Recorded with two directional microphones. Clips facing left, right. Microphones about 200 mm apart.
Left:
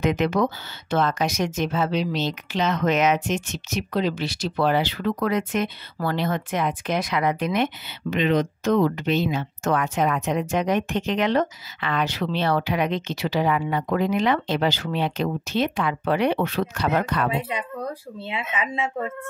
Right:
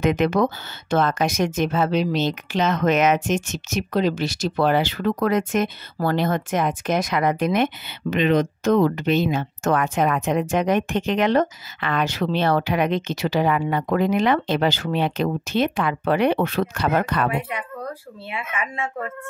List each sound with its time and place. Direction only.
0.0 s speech: 50° right (ahead or behind)
18.3 s speech: 20° left (ahead or behind)